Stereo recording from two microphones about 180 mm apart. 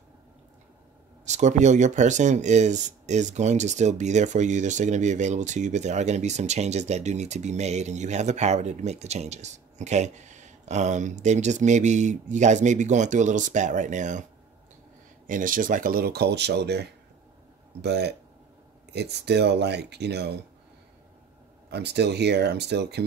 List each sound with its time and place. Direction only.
1.2 s speech: 40° right (ahead or behind)
15.2 s speech: 45° right (ahead or behind); by 20.4 s 65° right (ahead or behind)
21.6 s speech: 65° right (ahead or behind)